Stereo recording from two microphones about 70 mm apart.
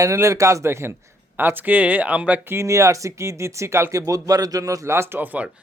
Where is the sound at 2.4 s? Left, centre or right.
Right.